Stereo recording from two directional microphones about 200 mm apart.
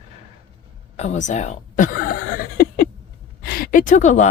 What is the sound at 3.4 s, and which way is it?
Speech, 45° left (ahead or behind).